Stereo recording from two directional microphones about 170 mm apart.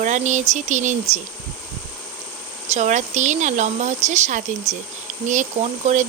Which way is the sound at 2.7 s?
45° right (ahead or behind).